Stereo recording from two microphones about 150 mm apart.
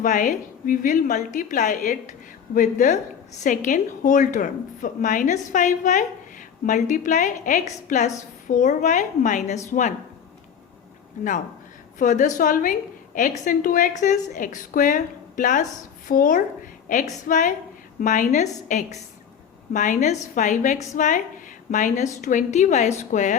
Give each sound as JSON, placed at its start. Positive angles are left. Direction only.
{"t": 0.0, "sound": "a woman's voice", "side_deg": 60}
{"t": 11.9, "sound": "a woman's voice", "side_deg": 55}